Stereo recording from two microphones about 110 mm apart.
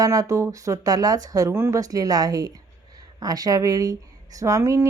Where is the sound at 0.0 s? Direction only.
30° right (ahead or behind).